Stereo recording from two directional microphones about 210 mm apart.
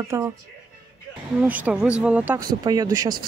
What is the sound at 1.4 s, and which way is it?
Speech, 5° right (ahead or behind).